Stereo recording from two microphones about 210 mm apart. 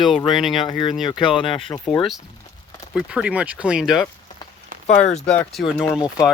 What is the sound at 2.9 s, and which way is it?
Speech, 5° right (ahead or behind).